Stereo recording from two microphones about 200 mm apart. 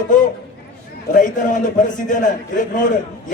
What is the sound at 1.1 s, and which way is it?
A man's voice, 40° left (ahead or behind).